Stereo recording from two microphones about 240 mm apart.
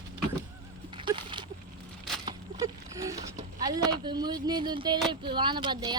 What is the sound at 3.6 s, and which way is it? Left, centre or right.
Speech, centre.